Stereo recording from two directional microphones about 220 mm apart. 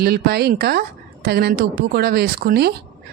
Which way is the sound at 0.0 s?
45° right (ahead or behind).